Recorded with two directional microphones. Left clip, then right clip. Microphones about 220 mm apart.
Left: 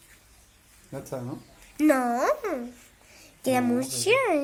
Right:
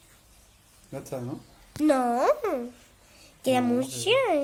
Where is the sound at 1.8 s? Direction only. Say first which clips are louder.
Even; 20° right (ahead or behind).